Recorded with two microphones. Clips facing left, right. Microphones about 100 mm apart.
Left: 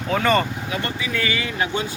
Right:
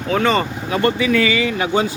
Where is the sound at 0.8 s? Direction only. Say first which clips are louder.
Right 13 dB; 85° right.